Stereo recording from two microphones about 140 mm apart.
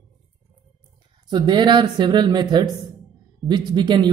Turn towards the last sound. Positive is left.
turn(degrees=-30)  # may be behind; listen again after turning